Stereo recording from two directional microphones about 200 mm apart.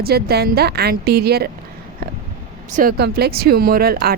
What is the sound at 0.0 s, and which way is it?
Speech, 50° right (ahead or behind).